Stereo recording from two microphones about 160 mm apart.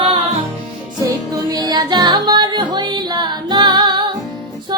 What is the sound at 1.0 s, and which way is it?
Music, 25° right (ahead or behind).